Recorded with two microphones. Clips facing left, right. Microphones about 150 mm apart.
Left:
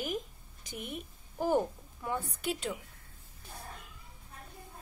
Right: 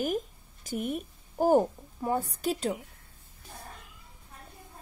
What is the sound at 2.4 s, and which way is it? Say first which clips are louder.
Speech: right 5 dB; 35° right (ahead or behind).